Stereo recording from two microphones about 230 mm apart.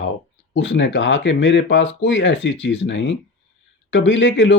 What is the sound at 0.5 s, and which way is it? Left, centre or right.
Speech, left.